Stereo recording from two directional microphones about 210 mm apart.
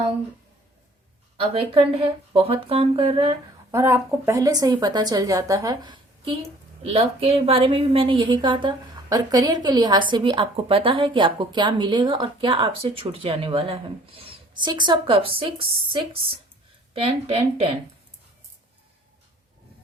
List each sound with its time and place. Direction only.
1.4 s a woman's voice: 25° right (ahead or behind)
3.7 s a woman's voice: 15° right (ahead or behind)